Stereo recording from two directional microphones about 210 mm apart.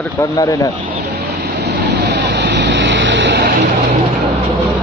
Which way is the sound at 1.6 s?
50° right (ahead or behind).